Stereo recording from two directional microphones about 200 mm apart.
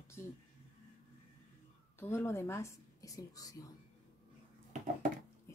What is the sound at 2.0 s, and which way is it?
Speech, 10° left (ahead or behind).